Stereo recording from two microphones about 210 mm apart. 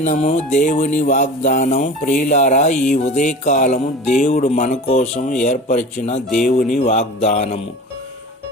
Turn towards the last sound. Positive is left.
turn(degrees=30)  # may be behind; listen again after turning